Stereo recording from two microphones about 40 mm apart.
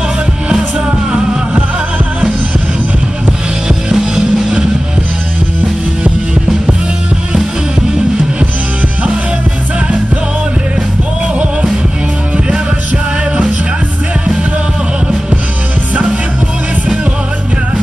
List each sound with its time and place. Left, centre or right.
3.6 s music: centre